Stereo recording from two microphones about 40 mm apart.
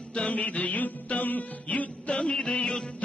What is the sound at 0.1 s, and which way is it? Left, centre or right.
Music, left.